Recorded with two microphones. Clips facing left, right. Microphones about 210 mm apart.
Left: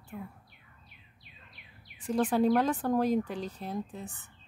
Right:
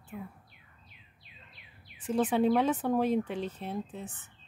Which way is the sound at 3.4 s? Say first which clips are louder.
Right 2 dB; 35° left (ahead or behind).